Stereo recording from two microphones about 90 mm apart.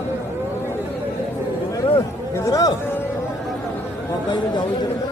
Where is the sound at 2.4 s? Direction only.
40° left (ahead or behind).